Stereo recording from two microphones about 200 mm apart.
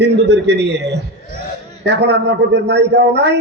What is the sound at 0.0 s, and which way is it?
A man's voice, 55° right (ahead or behind).